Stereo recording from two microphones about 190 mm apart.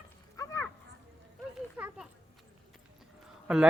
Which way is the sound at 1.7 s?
5° right (ahead or behind).